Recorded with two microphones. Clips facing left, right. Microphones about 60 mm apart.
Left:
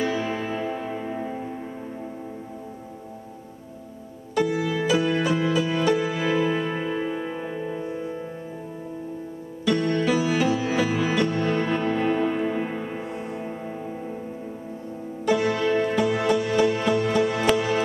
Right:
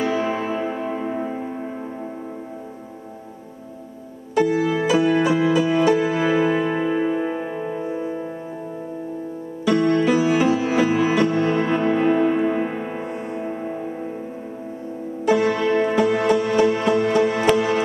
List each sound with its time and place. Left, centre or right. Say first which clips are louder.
0.0 s music: right 4 dB; centre
4.6 s music: right 4 dB; centre
9.7 s music: right 5 dB; centre
13.0 s music: right 4 dB; centre
13.5 s music: right 5 dB; centre
15.2 s music: right 3 dB; centre